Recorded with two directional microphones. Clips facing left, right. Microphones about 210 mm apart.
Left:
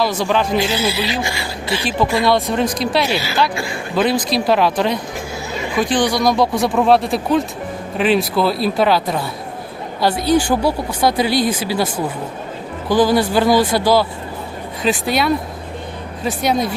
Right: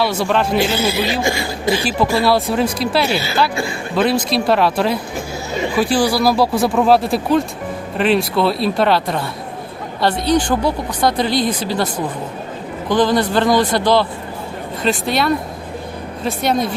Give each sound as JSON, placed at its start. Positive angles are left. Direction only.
{"t": 0.0, "sound": "speech", "side_deg": 0}
{"t": 0.9, "sound": "speech", "side_deg": -45}
{"t": 2.1, "sound": "speech", "side_deg": -5}
{"t": 10.2, "sound": "speech", "side_deg": 10}
{"t": 12.9, "sound": "speech", "side_deg": 5}